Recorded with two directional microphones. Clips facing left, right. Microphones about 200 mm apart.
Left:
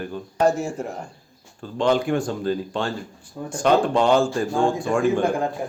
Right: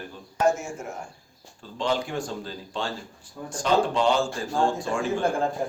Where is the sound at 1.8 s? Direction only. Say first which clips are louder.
Left 7 dB; 55° left (ahead or behind).